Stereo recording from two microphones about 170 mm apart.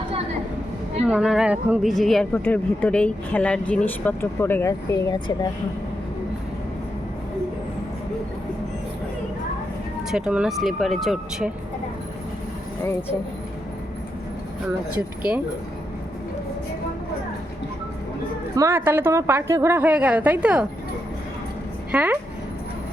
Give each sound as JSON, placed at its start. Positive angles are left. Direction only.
{"t": 1.0, "sound": "a woman's voice", "side_deg": 0}
{"t": 10.1, "sound": "speech", "side_deg": -5}
{"t": 18.5, "sound": "a woman's voice", "side_deg": -15}
{"t": 21.9, "sound": "a woman's voice", "side_deg": -10}